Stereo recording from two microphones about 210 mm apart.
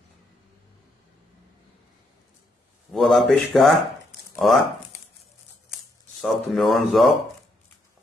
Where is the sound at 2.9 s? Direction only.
Centre (ahead or behind).